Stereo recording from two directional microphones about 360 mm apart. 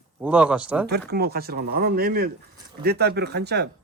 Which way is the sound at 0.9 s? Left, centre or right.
Right.